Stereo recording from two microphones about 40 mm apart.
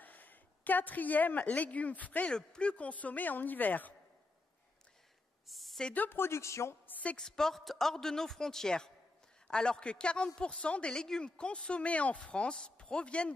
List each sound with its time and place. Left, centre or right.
0.0 s a woman's voice: left
2.3 s a man's voice: left
2.7 s a woman's voice: left
5.5 s a sound: centre
6.1 s speech: left
7.2 s a man's voice: centre
11.0 s speech: centre
11.8 s speech: left